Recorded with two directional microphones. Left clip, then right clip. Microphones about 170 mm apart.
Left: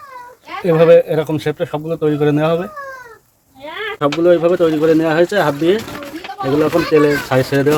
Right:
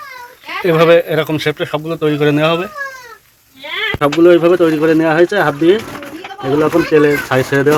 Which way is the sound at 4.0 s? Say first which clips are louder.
Right 3 dB; 15° right (ahead or behind).